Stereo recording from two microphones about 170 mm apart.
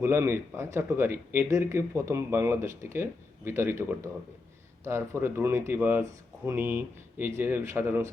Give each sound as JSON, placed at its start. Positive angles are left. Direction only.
{"t": 0.0, "sound": "speech", "side_deg": -15}